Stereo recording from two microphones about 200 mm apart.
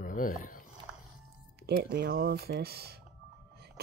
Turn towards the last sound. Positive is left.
turn(degrees=-55)  # may be behind; listen again after turning